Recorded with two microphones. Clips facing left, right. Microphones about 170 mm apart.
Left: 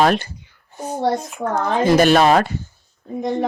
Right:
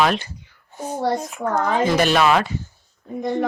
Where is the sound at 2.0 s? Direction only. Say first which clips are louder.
Left 5 dB; 40° left (ahead or behind).